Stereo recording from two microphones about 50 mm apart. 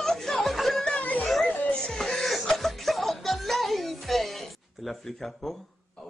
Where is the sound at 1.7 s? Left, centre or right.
Centre.